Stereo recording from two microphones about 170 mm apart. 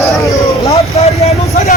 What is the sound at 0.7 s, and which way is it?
Vehicle, 40° left (ahead or behind).